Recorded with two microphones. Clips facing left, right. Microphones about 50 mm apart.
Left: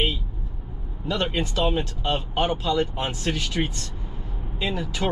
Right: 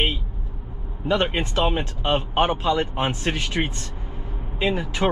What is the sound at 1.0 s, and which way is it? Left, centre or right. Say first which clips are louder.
A man's voice: right 4 dB; right.